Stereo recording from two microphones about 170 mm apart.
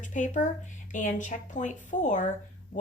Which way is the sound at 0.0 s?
45° left (ahead or behind).